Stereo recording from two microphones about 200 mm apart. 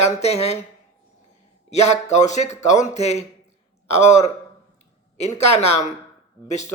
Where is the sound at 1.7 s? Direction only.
35° left (ahead or behind).